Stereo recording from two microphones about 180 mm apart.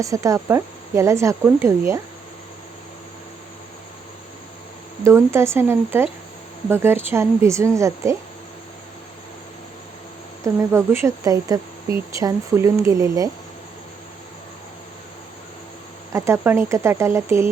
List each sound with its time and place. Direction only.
0.0 s speech: 20° right (ahead or behind)
5.0 s speech: 15° right (ahead or behind)
10.4 s speech: 15° right (ahead or behind)
16.1 s speech: 15° right (ahead or behind)